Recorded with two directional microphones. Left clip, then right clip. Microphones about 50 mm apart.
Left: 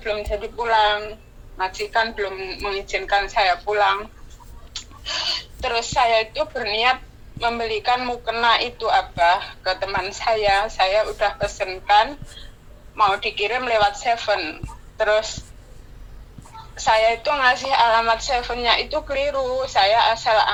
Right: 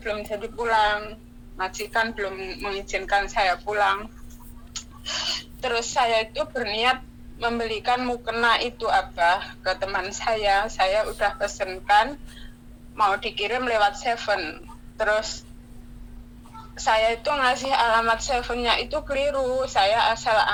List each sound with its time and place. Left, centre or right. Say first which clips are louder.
0.0 s speech: left 4 dB; right
16.6 s speech: left 3 dB; right